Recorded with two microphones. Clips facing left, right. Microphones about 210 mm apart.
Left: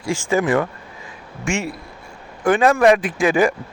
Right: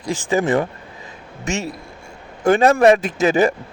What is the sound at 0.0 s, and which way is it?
Speech, 20° right (ahead or behind).